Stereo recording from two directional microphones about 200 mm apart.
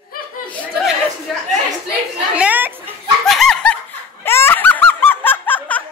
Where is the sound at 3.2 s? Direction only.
Centre (ahead or behind).